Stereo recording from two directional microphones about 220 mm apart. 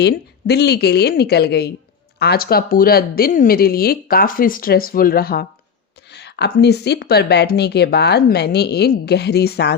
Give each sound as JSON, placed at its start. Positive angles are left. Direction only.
{"t": 0.0, "sound": "speech", "side_deg": 50}